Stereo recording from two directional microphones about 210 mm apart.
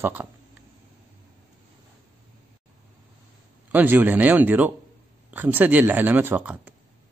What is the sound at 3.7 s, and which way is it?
A man's voice, 10° right (ahead or behind).